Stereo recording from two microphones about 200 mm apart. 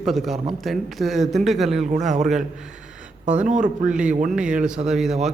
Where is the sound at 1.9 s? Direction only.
35° right (ahead or behind).